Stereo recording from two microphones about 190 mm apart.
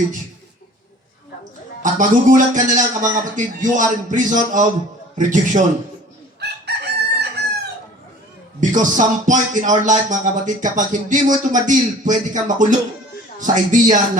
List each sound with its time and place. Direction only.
1.8 s a man's voice: 45° right (ahead or behind)
6.4 s chicken: 60° right (ahead or behind)
8.7 s speech: 40° right (ahead or behind)